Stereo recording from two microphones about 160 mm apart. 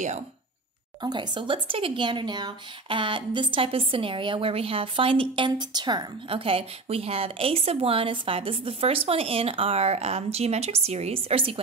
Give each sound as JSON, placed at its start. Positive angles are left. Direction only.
{"t": 1.0, "sound": "speech", "side_deg": -30}